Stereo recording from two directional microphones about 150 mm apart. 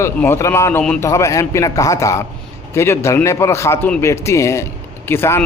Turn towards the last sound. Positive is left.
turn(degrees=15)  # may be behind; listen again after turning